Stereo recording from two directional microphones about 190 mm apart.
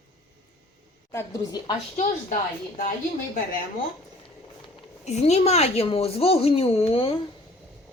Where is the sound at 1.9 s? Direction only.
40° left (ahead or behind).